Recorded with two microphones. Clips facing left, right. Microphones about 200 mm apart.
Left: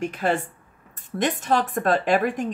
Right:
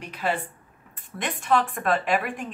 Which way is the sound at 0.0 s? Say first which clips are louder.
Left 5 dB; 45° left (ahead or behind).